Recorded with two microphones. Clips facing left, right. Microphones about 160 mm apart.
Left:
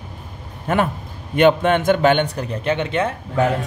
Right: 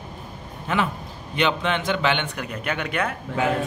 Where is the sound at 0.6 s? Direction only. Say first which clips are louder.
Left 5 dB; 50° left (ahead or behind); by 3.1 s 25° left (ahead or behind).